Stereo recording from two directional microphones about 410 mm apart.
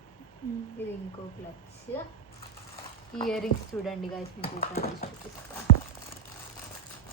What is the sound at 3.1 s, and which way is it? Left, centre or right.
Speech, centre.